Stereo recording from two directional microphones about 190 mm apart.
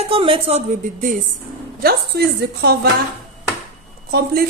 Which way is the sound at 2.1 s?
55° right (ahead or behind).